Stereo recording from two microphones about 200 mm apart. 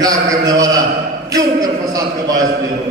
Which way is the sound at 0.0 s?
15° right (ahead or behind).